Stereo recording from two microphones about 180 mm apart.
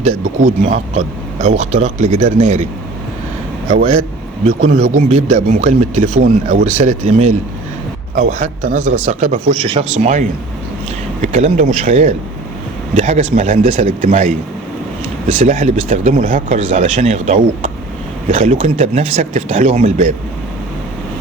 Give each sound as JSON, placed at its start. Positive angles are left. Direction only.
{"t": 0.0, "sound": "speech", "side_deg": -40}
{"t": 4.7, "sound": "speech", "side_deg": -45}
{"t": 11.3, "sound": "speech", "side_deg": -40}
{"t": 15.4, "sound": "speech", "side_deg": -40}